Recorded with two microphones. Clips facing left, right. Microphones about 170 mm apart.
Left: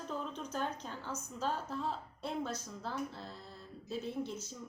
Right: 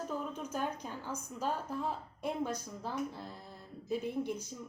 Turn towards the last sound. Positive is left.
turn(degrees=-15)  # may be behind; listen again after turning